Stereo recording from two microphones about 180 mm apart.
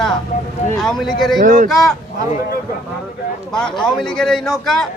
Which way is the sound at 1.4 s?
45° right (ahead or behind).